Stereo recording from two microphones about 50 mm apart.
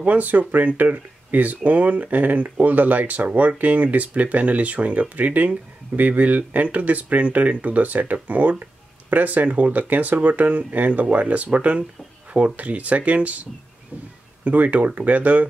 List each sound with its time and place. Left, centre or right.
0.0 s speech: right
14.4 s speech: right